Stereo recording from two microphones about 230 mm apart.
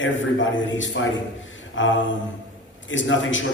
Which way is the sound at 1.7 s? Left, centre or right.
Left.